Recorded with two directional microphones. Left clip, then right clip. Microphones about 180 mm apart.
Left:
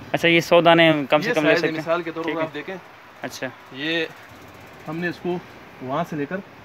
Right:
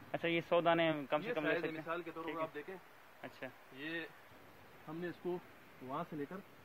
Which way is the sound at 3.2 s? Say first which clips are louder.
Left 19 dB; 20° left (ahead or behind).